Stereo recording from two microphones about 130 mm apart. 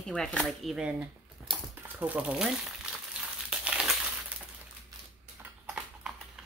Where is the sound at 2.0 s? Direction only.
10° right (ahead or behind).